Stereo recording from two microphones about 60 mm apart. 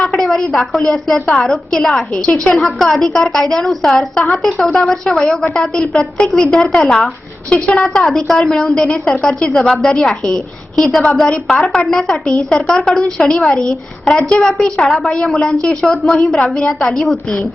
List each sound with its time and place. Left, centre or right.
0.0 s a woman's voice: centre
8.0 s a woman's voice: centre